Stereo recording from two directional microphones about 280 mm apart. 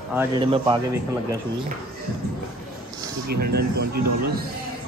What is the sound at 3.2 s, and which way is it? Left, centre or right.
A man's voice, right.